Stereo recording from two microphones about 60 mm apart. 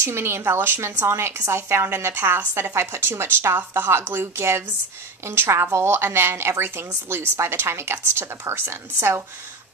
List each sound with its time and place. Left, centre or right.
0.0 s a woman's voice: right
1.1 s a woman's voice: right
4.4 s a woman's voice: right